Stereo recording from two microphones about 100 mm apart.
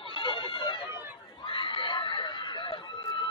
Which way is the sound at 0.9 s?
55° left (ahead or behind).